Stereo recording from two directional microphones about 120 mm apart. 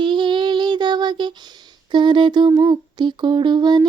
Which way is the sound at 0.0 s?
40° right (ahead or behind).